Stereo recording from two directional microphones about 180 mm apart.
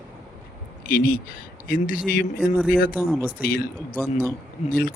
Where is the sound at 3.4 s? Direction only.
55° left (ahead or behind).